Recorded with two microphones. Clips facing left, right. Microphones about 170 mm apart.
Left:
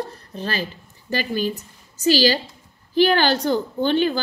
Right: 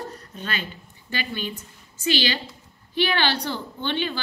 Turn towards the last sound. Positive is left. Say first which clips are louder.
# left 8 dB
turn(degrees=40)  # may be behind; listen again after turning